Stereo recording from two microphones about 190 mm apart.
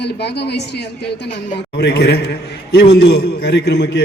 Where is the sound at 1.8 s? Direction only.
60° left (ahead or behind).